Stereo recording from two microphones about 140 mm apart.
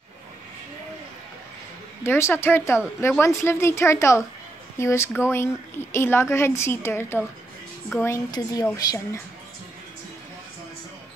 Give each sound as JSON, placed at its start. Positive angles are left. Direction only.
{"t": 2.0, "sound": "a woman's voice", "side_deg": 20}